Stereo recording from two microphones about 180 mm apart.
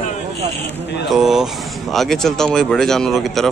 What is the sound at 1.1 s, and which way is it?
Speech, centre (ahead or behind).